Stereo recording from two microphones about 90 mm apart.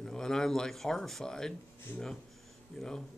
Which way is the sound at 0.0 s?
5° left (ahead or behind).